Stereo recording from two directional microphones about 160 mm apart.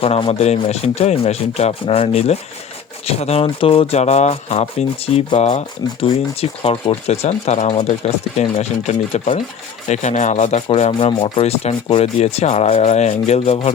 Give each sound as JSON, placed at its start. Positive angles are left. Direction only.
{"t": 0.0, "sound": "speech", "side_deg": 40}